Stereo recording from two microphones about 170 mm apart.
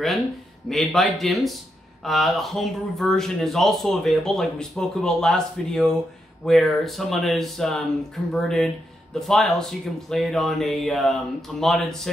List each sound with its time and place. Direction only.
0.7 s speech: centre (ahead or behind)